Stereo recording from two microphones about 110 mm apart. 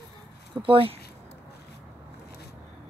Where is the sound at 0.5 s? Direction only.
50° right (ahead or behind).